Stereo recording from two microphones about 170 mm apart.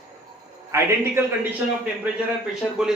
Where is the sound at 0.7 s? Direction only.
15° right (ahead or behind).